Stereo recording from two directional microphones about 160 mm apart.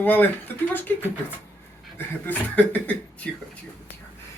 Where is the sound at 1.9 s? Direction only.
10° left (ahead or behind).